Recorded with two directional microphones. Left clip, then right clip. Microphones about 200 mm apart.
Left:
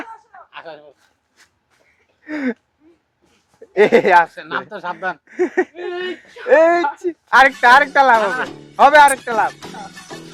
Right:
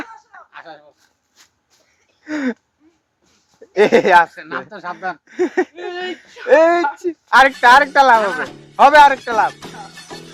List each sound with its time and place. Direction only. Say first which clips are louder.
0.0 s chop: even; 20° right (ahead or behind)
0.5 s speech: left 3 dB; 15° left (ahead or behind)
1.4 s a sound: right 1 dB; 10° right (ahead or behind)
2.2 s a woman's voice: right 1 dB; 10° right (ahead or behind)
3.8 s a woman's voice: even; 15° right (ahead or behind)
4.4 s speech: left 2 dB; 15° left (ahead or behind)
5.2 s a woman's voice: right 1 dB; 15° right (ahead or behind)
5.7 s a sound: left 1 dB; centre (ahead or behind)
6.2 s speech: even; centre (ahead or behind)
6.5 s a woman's voice: even; 15° right (ahead or behind)
9.5 s music: even; centre (ahead or behind)